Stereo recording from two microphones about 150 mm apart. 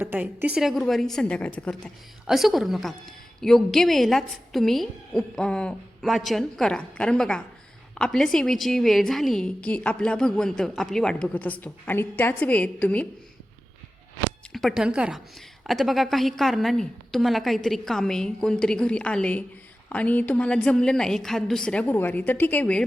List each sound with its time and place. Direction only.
0.0 s a woman's voice: 10° right (ahead or behind); by 13.1 s 10° left (ahead or behind)
14.5 s a woman's voice: centre (ahead or behind)